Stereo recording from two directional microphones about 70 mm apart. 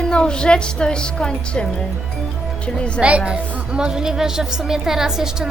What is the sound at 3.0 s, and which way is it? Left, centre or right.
A woman's voice, centre.